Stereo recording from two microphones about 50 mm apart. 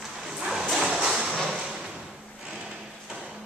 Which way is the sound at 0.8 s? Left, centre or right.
Centre.